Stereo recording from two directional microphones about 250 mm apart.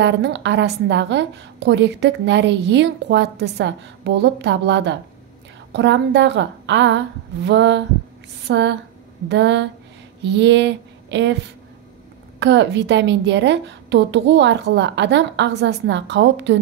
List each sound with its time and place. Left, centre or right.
0.0 s a woman's voice: right
12.4 s a woman's voice: right